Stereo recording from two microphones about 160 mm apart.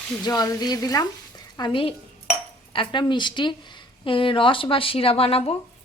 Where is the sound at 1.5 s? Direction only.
30° left (ahead or behind).